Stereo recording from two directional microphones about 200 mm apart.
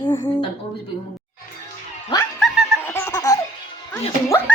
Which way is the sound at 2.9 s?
15° left (ahead or behind).